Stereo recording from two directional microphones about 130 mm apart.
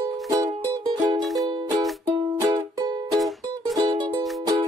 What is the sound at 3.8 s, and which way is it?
Music, 25° right (ahead or behind).